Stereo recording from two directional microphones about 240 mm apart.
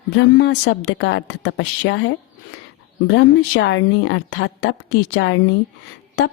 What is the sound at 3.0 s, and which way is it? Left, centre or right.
A woman's voice, left.